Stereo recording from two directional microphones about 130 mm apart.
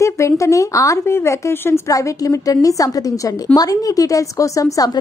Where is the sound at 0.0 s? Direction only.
25° left (ahead or behind).